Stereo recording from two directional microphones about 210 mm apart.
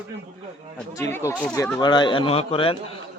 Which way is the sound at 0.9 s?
15° left (ahead or behind).